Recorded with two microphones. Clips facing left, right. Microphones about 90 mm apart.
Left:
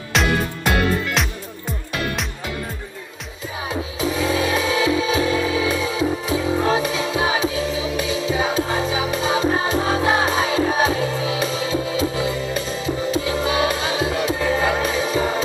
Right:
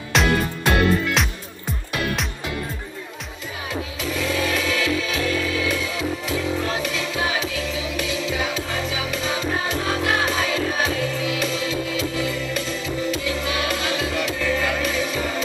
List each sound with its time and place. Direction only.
0.1 s music: centre (ahead or behind)
3.6 s music: 25° left (ahead or behind)